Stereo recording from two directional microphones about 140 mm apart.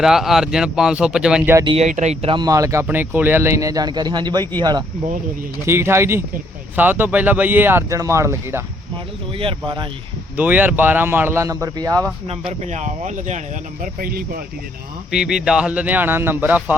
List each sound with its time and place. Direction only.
0.0 s speech: 5° right (ahead or behind)
1.8 s speech: 55° right (ahead or behind)
2.3 s speech: 25° right (ahead or behind)
5.6 s speech: 20° right (ahead or behind)
9.4 s speech: 40° right (ahead or behind)
10.3 s speech: 10° right (ahead or behind)
12.3 s speech: 50° right (ahead or behind)
13.8 s speech: 90° right
15.1 s speech: 5° right (ahead or behind)